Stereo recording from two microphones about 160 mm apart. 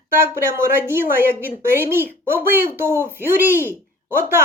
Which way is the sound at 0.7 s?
15° right (ahead or behind).